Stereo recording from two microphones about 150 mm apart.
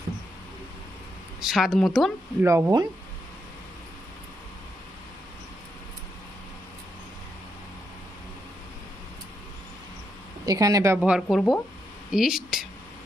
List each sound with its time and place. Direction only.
1.4 s speech: centre (ahead or behind)
2.4 s speech: 15° right (ahead or behind)
10.4 s speech: 25° right (ahead or behind)
10.9 s speech: 5° right (ahead or behind)